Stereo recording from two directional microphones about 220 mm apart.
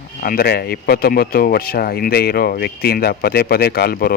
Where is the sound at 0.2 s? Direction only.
40° left (ahead or behind).